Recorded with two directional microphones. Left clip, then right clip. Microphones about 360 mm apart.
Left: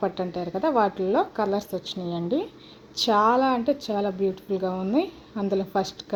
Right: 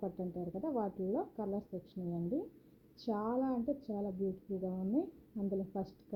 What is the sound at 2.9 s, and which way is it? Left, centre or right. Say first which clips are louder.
Speech: left 18 dB; centre.